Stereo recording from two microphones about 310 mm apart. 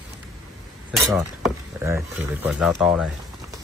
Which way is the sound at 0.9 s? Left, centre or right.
Centre.